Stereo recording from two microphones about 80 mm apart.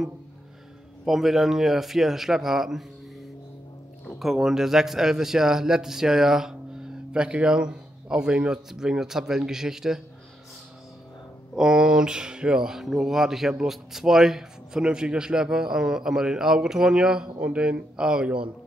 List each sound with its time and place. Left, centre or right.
1.0 s a man's voice: centre
4.2 s speech: centre
11.5 s speech: centre